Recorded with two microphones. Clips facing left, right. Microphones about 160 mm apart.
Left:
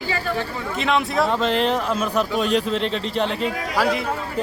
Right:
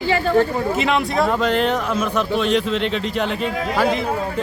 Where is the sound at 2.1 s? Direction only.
40° left (ahead or behind).